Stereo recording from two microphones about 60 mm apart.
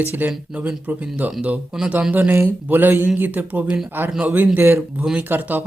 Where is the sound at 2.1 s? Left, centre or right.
Right.